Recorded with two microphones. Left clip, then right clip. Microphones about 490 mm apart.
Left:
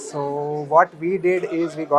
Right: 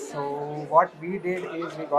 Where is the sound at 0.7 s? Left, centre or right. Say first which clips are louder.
Left 4 dB; left.